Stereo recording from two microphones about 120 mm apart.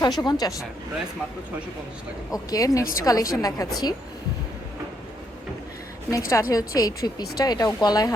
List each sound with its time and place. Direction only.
0.0 s a woman's voice: 35° left (ahead or behind)
2.3 s a woman's voice: 30° left (ahead or behind)
6.1 s a woman's voice: 30° left (ahead or behind)